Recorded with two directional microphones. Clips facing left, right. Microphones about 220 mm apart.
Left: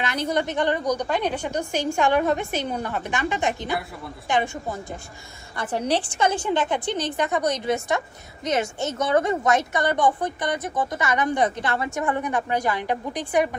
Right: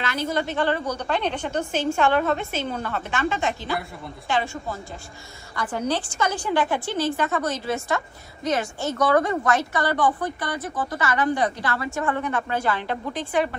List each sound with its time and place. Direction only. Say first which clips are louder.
0.0 s a woman's voice: left 1 dB; 20° left (ahead or behind)
5.9 s a woman's voice: left 3 dB; 30° left (ahead or behind)